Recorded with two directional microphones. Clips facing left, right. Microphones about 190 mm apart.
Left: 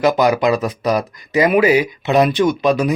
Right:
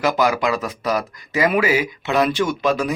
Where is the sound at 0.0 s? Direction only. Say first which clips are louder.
Left 5 dB; 20° left (ahead or behind).